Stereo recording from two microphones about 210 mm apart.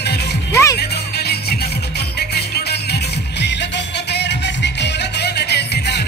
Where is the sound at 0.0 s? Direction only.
50° left (ahead or behind).